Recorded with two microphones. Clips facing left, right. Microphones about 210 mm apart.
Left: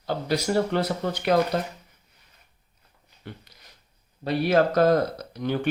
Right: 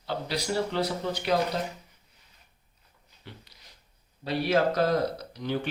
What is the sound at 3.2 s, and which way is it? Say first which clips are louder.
Speech: left 6 dB; 50° left (ahead or behind).